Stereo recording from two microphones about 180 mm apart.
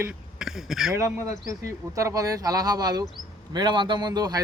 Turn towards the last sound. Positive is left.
turn(degrees=-20)  # may be behind; listen again after turning